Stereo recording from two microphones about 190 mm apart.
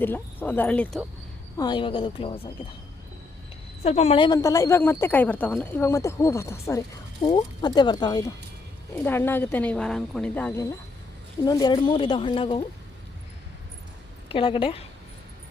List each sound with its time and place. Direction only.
0.0 s speech: 10° left (ahead or behind)
1.5 s speech: 25° left (ahead or behind)
3.8 s speech: 35° left (ahead or behind)
14.3 s speech: 25° left (ahead or behind)